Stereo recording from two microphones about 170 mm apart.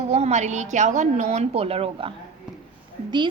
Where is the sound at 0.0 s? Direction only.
40° right (ahead or behind).